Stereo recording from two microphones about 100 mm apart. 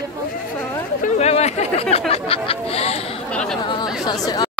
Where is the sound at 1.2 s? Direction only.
90° left.